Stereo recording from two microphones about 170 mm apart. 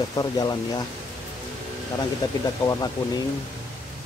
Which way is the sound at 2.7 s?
20° left (ahead or behind).